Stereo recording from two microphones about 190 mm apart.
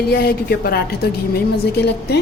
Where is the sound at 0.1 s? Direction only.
55° left (ahead or behind).